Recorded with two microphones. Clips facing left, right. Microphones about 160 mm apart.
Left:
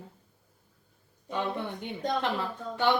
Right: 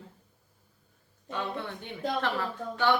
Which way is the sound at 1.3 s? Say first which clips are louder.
Left 3 dB; 15° left (ahead or behind).